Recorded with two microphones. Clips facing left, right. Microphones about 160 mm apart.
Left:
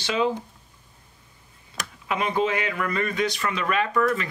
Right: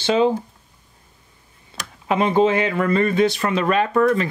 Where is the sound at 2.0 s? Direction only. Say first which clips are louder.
Right 7 dB; 30° right (ahead or behind).